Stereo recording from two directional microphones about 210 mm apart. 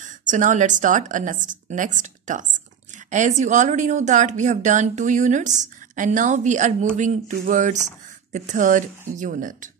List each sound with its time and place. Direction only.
0.0 s a woman's voice: 35° right (ahead or behind)